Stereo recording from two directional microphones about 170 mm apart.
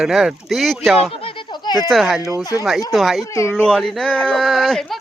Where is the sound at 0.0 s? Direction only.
5° right (ahead or behind).